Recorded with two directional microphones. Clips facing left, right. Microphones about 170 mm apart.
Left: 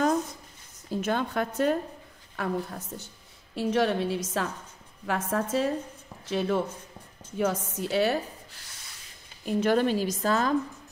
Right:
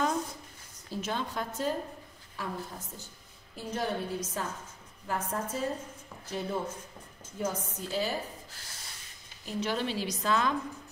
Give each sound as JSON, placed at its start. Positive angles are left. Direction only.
{"t": 0.8, "sound": "a woman's voice", "side_deg": 55}
{"t": 3.5, "sound": "a woman's voice", "side_deg": 90}
{"t": 7.3, "sound": "a woman's voice", "side_deg": 75}
{"t": 9.5, "sound": "speech", "side_deg": 50}